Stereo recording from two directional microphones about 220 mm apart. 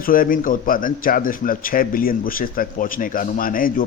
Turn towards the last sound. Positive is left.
turn(degrees=40)  # may be behind; listen again after turning